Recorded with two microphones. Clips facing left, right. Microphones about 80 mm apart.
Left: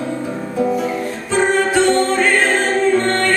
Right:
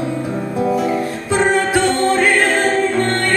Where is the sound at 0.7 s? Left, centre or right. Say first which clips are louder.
Right 2 dB; centre.